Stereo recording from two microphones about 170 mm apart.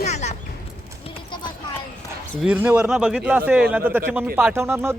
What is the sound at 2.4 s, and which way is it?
Speech, 5° right (ahead or behind).